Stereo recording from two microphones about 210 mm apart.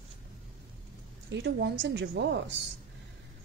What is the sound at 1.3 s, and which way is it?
A woman's voice, 55° right (ahead or behind).